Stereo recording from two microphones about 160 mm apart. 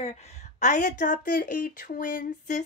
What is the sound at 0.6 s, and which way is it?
A woman's voice, 50° left (ahead or behind).